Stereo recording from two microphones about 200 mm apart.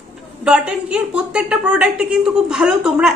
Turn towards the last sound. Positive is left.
turn(degrees=-5)  # may be behind; listen again after turning